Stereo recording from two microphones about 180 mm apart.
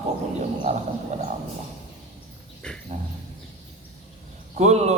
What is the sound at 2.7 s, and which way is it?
Dog, 5° left (ahead or behind).